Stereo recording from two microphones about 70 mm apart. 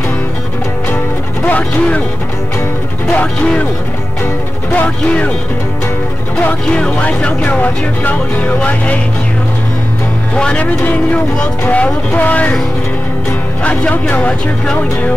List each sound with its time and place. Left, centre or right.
1.4 s speech: left
3.1 s speech: centre
4.7 s speech: centre
6.6 s speech: centre
10.3 s speech: centre
13.7 s speech: centre